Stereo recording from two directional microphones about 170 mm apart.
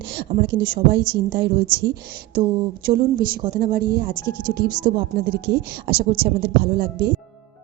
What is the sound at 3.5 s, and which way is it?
Speech, 60° right (ahead or behind).